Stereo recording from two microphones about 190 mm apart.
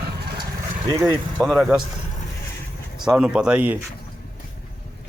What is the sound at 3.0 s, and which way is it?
Speech, 5° right (ahead or behind).